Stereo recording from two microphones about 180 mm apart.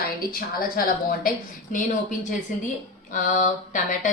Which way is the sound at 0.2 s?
55° left (ahead or behind).